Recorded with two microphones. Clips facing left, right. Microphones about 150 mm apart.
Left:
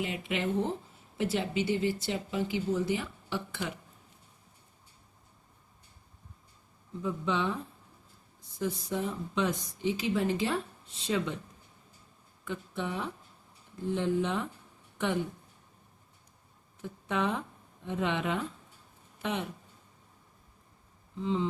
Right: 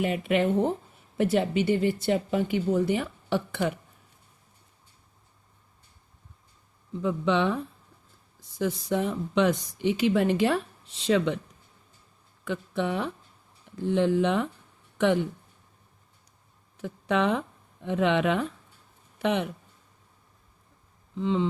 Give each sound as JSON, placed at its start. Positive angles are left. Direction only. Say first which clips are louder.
{"t": 0.0, "sound": "speech", "louder": "right 8 dB", "side_deg": -55}
{"t": 7.0, "sound": "a woman's voice", "louder": "right 6 dB", "side_deg": -70}
{"t": 12.5, "sound": "a woman's voice", "louder": "right 7 dB", "side_deg": -70}
{"t": 16.7, "sound": "a woman's voice", "louder": "right 7 dB", "side_deg": -80}
{"t": 21.2, "sound": "a woman's voice", "louder": "right 5 dB", "side_deg": -75}